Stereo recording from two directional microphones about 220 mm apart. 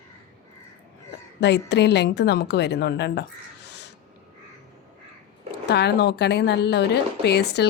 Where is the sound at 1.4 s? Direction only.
50° left (ahead or behind).